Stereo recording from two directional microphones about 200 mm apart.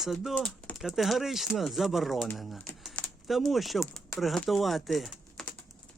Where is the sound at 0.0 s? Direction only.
Centre (ahead or behind).